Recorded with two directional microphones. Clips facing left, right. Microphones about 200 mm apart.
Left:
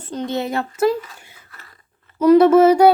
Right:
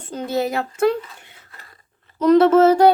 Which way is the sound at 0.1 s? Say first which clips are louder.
Right 1 dB; 5° right (ahead or behind).